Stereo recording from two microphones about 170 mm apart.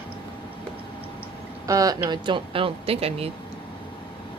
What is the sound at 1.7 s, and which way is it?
Speech, 20° right (ahead or behind).